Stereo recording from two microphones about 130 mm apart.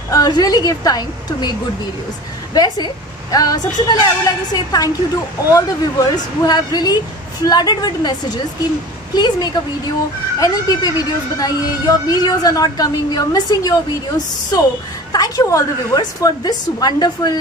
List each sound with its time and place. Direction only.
0.1 s speech: 30° left (ahead or behind)
2.5 s a woman's voice: 30° left (ahead or behind)